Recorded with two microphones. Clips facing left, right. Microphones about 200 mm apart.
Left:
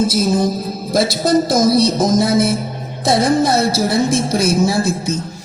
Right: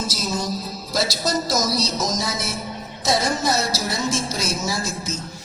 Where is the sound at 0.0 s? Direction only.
55° left (ahead or behind).